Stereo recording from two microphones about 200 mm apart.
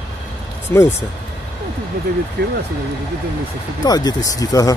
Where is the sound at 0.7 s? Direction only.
10° left (ahead or behind).